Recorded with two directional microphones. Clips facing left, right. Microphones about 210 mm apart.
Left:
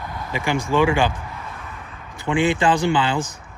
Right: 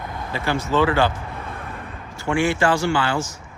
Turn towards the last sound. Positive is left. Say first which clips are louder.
# left 1 dB
turn(degrees=20)  # may be behind; listen again after turning